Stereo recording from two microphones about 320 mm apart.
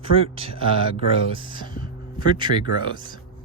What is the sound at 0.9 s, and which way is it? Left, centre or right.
Speech, centre.